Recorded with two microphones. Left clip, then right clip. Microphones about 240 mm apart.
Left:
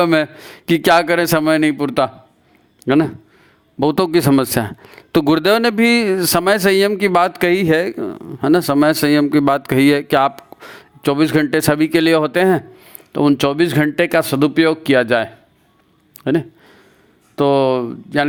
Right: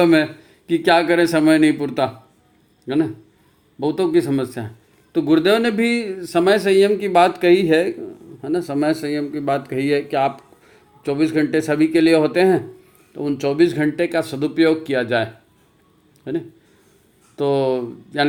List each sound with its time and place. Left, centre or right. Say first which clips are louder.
0.0 s a man's voice: left 1 dB; left